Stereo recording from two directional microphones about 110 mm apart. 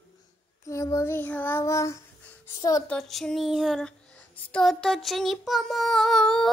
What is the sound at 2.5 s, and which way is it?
Speech, 35° left (ahead or behind).